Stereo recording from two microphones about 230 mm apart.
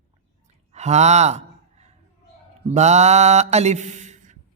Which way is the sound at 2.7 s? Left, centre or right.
Right.